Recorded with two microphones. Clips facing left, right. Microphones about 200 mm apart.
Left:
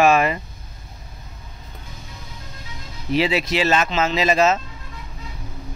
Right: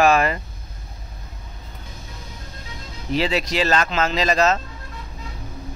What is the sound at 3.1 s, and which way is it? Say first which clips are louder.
Speech: left 2 dB; 10° left (ahead or behind).